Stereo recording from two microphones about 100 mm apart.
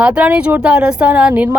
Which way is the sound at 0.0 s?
10° right (ahead or behind).